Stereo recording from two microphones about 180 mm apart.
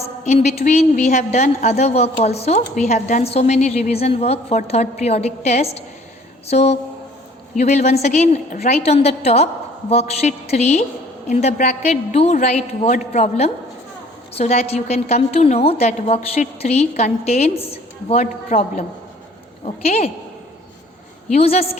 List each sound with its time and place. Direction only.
0.3 s a woman's voice: 35° left (ahead or behind)
21.3 s a woman's voice: 35° left (ahead or behind)